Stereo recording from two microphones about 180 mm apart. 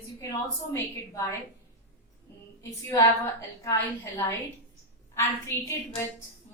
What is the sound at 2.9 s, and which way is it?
A woman's voice, 20° left (ahead or behind).